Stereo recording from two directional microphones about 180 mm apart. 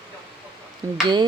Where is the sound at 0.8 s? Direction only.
15° right (ahead or behind).